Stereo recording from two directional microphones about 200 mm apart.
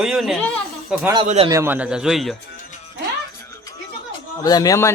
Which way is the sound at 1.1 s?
30° right (ahead or behind).